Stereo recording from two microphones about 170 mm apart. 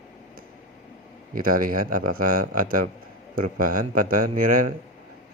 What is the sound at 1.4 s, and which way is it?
Speech, 55° right (ahead or behind).